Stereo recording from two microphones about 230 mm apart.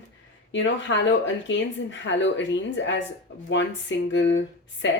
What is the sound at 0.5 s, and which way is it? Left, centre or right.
A woman's voice, left.